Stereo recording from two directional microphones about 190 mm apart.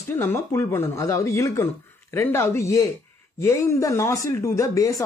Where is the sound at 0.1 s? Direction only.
10° left (ahead or behind).